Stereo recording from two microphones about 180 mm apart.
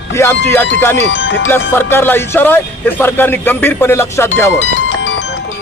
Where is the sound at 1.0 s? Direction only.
90° left.